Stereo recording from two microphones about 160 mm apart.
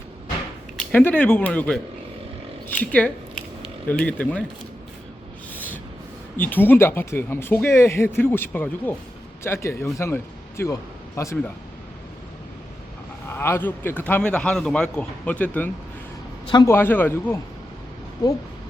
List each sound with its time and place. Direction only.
0.9 s speech: 10° left (ahead or behind)
5.5 s a sound: 10° left (ahead or behind)
6.3 s speech: 10° left (ahead or behind)
13.3 s speech: 15° left (ahead or behind)
18.2 s speech: 25° left (ahead or behind)